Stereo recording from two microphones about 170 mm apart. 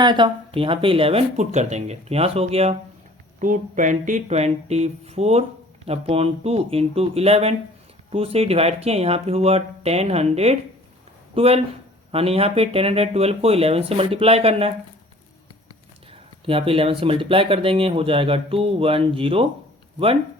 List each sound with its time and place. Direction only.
0.0 s speech: 25° right (ahead or behind)
3.4 s speech: 50° right (ahead or behind)
16.5 s speech: 35° right (ahead or behind)